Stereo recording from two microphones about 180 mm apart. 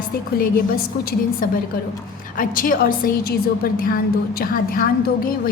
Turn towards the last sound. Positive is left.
turn(degrees=50)  # may be behind; listen again after turning